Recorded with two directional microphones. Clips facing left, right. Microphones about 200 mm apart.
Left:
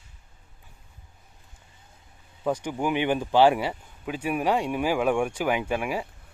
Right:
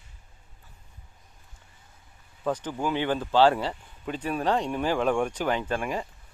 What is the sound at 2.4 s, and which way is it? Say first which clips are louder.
Speech: left 2 dB; 10° left (ahead or behind).